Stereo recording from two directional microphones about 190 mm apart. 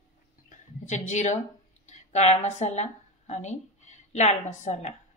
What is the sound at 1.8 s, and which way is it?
A woman's voice, 35° left (ahead or behind).